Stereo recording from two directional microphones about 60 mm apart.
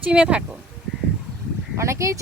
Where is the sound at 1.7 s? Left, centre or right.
Right.